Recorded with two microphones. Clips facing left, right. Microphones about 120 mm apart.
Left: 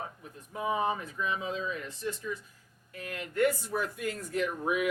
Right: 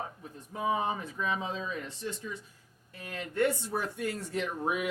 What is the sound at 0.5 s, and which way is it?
Speech, 25° right (ahead or behind).